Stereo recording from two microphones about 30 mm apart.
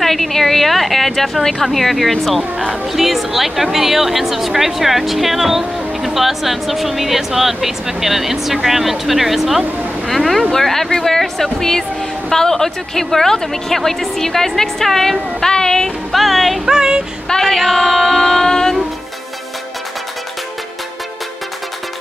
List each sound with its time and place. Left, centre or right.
0.0 s a woman's voice: centre
10.0 s a woman's voice: centre
15.4 s speech: left
16.1 s speech: centre
16.6 s female singing: right
17.3 s a woman's voice: centre
17.6 s speech: centre
18.5 s a woman's voice: centre